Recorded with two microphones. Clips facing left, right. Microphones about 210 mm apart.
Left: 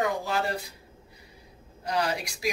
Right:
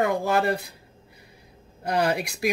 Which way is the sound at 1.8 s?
55° right (ahead or behind).